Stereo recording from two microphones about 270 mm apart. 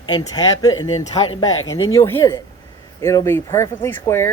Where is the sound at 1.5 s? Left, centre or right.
Left.